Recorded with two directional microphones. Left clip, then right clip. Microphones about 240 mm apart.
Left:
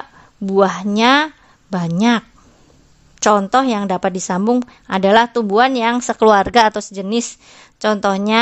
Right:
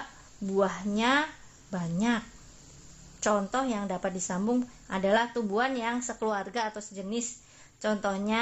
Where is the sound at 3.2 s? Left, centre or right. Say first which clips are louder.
Left 15 dB; left.